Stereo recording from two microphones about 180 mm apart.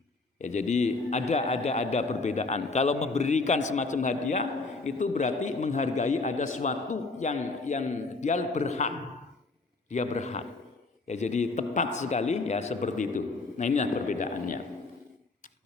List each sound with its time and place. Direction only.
0.4 s a man's voice: 40° left (ahead or behind)
9.9 s a man's voice: 40° left (ahead or behind)